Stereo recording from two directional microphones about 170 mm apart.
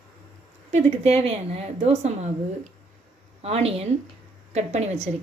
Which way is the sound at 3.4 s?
35° right (ahead or behind).